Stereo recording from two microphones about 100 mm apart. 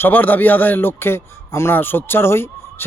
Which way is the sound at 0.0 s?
20° left (ahead or behind).